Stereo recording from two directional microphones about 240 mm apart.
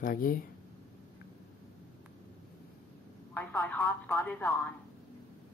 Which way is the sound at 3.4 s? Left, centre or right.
Centre.